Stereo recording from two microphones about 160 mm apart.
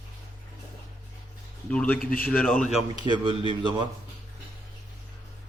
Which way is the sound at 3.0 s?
30° right (ahead or behind).